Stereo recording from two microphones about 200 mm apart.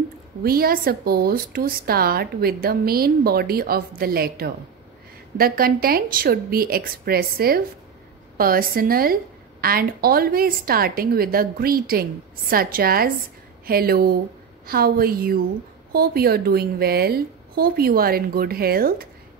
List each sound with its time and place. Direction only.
0.4 s a woman's voice: 50° right (ahead or behind)